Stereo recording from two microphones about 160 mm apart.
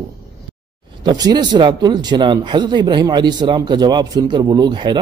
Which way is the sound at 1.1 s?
25° right (ahead or behind).